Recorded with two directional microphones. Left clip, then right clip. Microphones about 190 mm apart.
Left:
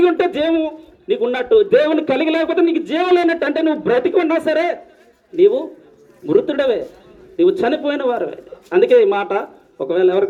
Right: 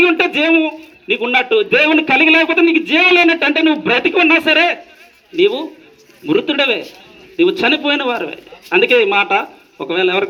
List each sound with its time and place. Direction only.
0.0 s a man's voice: 20° right (ahead or behind)